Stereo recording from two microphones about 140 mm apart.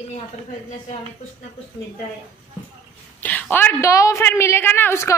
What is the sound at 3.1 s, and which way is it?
A woman's voice, 10° left (ahead or behind).